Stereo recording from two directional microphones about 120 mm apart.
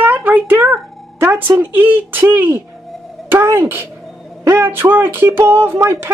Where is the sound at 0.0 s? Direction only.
15° right (ahead or behind).